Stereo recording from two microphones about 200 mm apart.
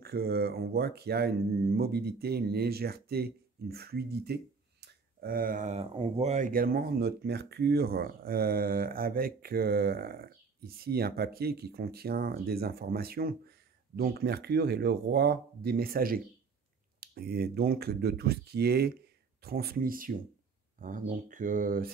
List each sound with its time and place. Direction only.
0.0 s speech: 50° right (ahead or behind)